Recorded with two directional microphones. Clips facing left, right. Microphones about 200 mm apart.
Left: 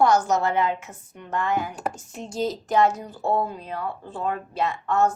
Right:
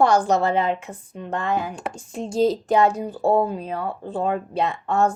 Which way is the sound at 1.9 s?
30° right (ahead or behind).